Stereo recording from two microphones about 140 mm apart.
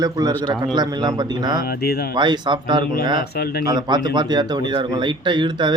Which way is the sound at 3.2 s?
90° left.